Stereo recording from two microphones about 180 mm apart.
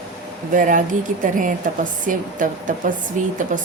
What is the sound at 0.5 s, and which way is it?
A woman's voice, 45° right (ahead or behind).